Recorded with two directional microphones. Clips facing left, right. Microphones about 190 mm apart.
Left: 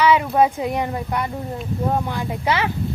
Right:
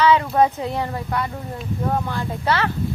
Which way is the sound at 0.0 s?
10° left (ahead or behind).